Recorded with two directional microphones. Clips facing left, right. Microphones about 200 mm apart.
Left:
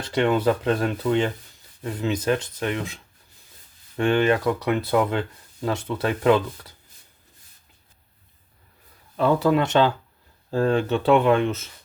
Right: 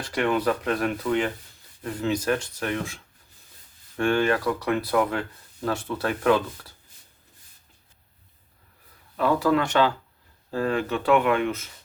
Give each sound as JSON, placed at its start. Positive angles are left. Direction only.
{"t": 0.0, "sound": "speech", "side_deg": 25}
{"t": 9.1, "sound": "speech", "side_deg": 25}